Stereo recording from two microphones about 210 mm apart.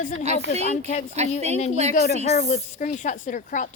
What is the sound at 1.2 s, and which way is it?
Speech, 30° right (ahead or behind).